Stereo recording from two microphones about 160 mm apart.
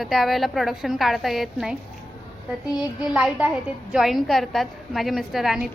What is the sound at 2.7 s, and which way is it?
A woman's voice, 5° right (ahead or behind).